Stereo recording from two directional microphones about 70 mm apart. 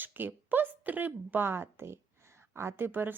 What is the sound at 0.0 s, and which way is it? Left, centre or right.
A woman's voice, right.